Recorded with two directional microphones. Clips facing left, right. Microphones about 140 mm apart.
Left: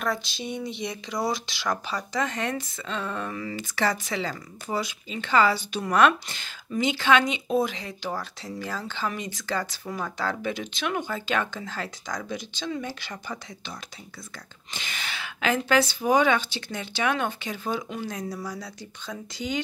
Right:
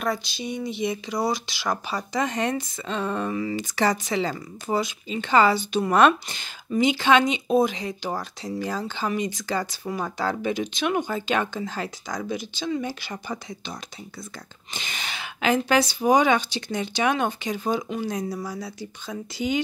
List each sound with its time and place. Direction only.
0.0 s speech: centre (ahead or behind)
2.1 s speech: 20° right (ahead or behind)